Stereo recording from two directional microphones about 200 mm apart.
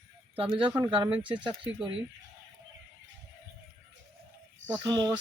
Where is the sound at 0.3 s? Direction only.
25° right (ahead or behind).